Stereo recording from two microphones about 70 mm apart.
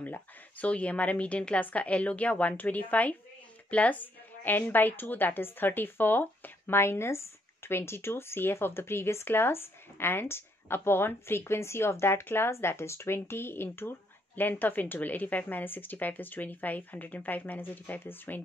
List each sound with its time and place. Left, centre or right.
0.0 s a woman's voice: left